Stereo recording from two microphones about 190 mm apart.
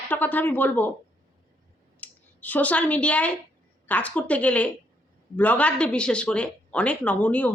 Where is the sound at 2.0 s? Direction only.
10° left (ahead or behind).